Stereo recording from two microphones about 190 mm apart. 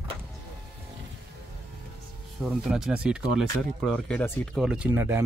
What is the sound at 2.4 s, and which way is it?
Speech, 5° right (ahead or behind).